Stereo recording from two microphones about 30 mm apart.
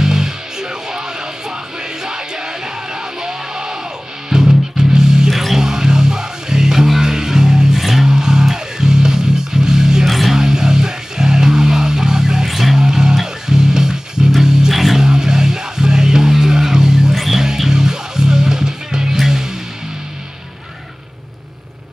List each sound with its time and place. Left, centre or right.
0.0 s music: right
5.3 s music: centre
5.6 s music: right
7.7 s music: centre
8.0 s music: right
10.0 s music: centre
10.3 s music: right
12.4 s music: centre
12.7 s music: right
14.7 s music: centre
15.0 s music: right
17.1 s music: centre
17.4 s music: right